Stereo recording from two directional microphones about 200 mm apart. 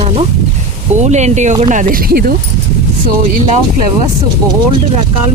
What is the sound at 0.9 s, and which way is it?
Speech, 35° right (ahead or behind).